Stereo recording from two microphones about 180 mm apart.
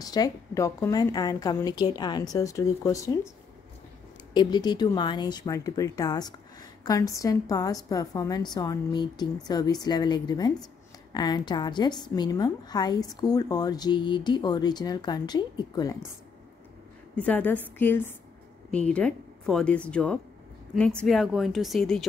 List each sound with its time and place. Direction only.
0.0 s a woman's voice: 20° left (ahead or behind)
4.3 s a woman's voice: 25° left (ahead or behind)
17.1 s a woman's voice: 10° left (ahead or behind)